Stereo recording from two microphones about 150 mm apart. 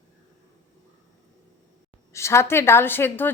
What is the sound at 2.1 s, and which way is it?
A woman's voice, 20° left (ahead or behind).